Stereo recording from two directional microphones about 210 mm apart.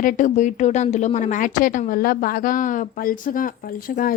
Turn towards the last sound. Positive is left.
turn(degrees=40)  # may be behind; listen again after turning